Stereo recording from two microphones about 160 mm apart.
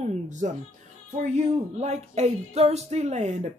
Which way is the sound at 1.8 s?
45° right (ahead or behind).